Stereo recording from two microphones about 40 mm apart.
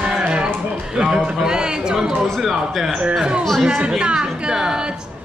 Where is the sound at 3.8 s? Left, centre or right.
Right.